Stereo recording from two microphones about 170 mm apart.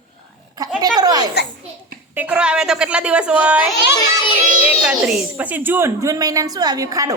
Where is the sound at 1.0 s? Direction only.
20° right (ahead or behind).